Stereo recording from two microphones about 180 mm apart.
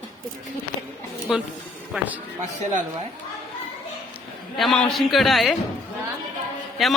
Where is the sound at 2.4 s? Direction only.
40° right (ahead or behind).